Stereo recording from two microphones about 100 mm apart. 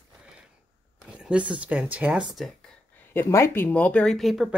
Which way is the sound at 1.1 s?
10° right (ahead or behind).